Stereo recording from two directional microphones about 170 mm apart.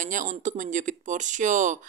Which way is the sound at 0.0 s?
50° right (ahead or behind).